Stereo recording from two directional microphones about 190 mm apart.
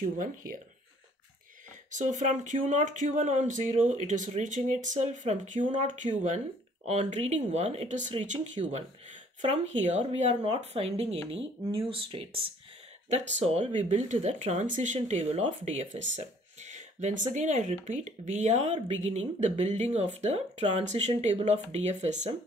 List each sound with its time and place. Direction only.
2.0 s speech: 40° right (ahead or behind)